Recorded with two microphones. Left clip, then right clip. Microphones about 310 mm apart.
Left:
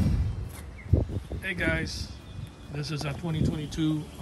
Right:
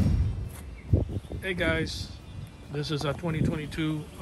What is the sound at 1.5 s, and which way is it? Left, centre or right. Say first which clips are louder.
Speech: right 1 dB; centre.